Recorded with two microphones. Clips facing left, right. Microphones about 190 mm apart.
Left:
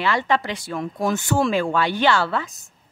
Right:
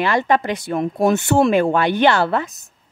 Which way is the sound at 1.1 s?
65° right (ahead or behind).